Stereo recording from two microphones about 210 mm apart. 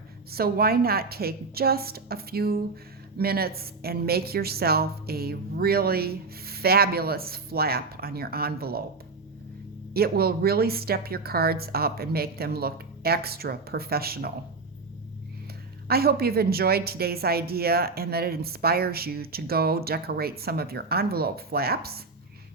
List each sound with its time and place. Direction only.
0.3 s a woman's voice: 45° right (ahead or behind)
9.9 s a woman's voice: 50° right (ahead or behind)
15.9 s a woman's voice: 45° right (ahead or behind)